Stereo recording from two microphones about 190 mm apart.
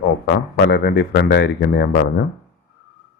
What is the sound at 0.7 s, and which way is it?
A man's voice, 60° left (ahead or behind).